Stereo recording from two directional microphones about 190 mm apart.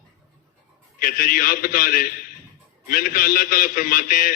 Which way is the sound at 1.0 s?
50° left (ahead or behind).